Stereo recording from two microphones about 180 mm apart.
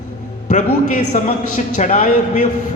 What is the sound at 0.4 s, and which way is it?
A man's voice, 40° left (ahead or behind).